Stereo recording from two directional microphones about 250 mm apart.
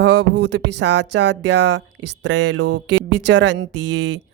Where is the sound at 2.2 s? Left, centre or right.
Right.